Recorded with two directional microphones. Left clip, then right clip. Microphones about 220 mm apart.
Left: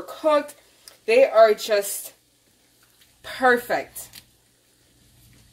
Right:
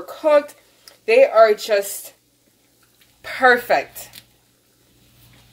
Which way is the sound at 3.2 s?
20° left (ahead or behind).